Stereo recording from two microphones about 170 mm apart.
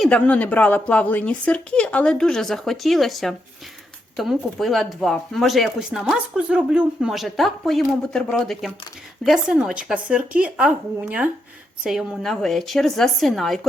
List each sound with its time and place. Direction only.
0.0 s speech: 5° left (ahead or behind)